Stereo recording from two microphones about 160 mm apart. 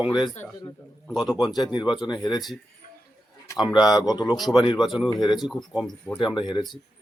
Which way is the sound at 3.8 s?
25° left (ahead or behind).